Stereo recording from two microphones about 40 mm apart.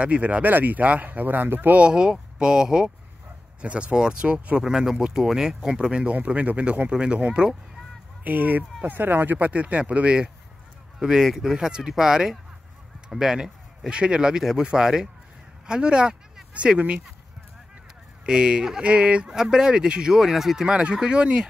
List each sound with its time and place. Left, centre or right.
0.0 s speech: right
1.8 s speech: right
3.6 s speech: right
4.6 s speech: centre
6.2 s speech: right
8.2 s speech: right
9.5 s speech: right
11.0 s speech: centre
13.8 s speech: right
18.2 s speech: right
19.3 s speech: centre
20.6 s speech: right